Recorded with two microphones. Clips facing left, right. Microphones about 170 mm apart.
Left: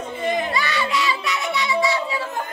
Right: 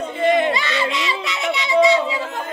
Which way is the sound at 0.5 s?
20° right (ahead or behind).